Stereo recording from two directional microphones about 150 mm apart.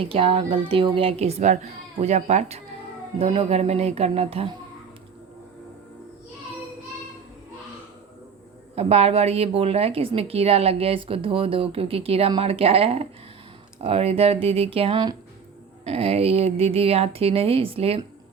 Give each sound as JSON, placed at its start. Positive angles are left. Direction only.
{"t": 0.0, "sound": "a woman's voice", "side_deg": -40}
{"t": 8.7, "sound": "a woman's voice", "side_deg": -45}